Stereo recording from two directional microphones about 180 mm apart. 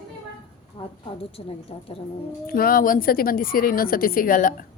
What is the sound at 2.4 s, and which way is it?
A woman's voice, 55° left (ahead or behind).